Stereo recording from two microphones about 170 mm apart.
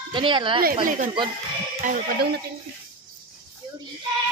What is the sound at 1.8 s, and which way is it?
Speech, 50° right (ahead or behind).